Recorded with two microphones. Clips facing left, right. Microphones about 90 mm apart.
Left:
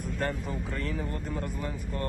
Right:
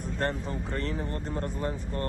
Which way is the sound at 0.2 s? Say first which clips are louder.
Right 2 dB; 45° right (ahead or behind).